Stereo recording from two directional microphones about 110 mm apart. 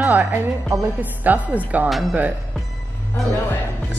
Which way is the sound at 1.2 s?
15° right (ahead or behind).